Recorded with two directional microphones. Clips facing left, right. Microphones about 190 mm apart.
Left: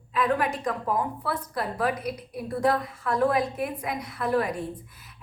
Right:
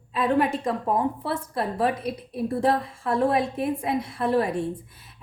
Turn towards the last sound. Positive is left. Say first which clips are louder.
# right 3 dB
turn(degrees=-30)  # may be behind; listen again after turning